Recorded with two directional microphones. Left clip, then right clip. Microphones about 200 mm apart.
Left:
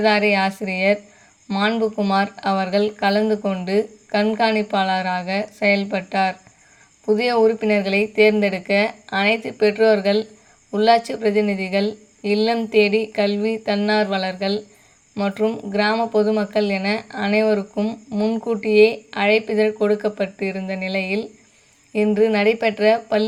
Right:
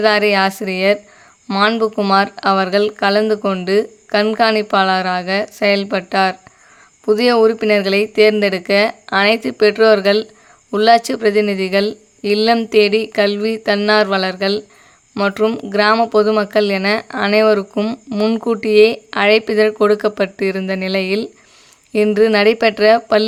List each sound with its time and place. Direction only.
0.0 s speech: 40° right (ahead or behind)